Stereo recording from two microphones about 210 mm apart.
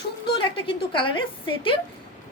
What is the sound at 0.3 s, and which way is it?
A woman's voice, 25° left (ahead or behind).